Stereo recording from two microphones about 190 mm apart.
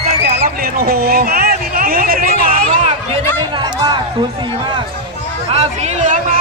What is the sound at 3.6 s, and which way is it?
Speech, 25° right (ahead or behind).